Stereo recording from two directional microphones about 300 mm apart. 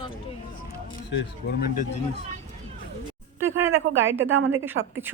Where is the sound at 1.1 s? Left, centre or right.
Left.